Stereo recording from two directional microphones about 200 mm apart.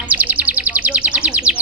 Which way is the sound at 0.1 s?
10° right (ahead or behind).